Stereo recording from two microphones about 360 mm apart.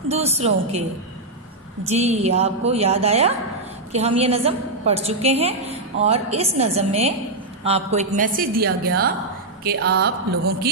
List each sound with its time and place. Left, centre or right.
0.1 s a woman's voice: centre
1.9 s a woman's voice: centre